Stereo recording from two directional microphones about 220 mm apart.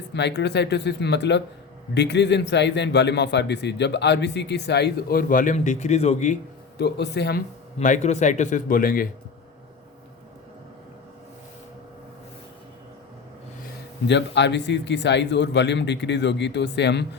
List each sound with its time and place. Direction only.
0.1 s a man's voice: 50° left (ahead or behind); by 6.3 s 30° left (ahead or behind)
6.7 s speech: 50° left (ahead or behind)
14.1 s a man's voice: 50° left (ahead or behind)